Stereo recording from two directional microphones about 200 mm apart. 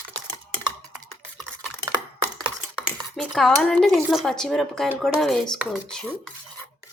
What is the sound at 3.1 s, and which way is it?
Speech, centre (ahead or behind).